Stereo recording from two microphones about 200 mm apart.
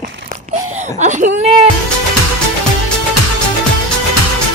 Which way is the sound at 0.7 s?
35° right (ahead or behind).